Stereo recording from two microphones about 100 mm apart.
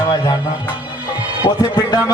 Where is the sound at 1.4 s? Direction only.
45° left (ahead or behind).